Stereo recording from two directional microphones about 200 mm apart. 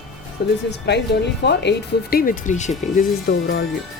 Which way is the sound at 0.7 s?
55° left (ahead or behind).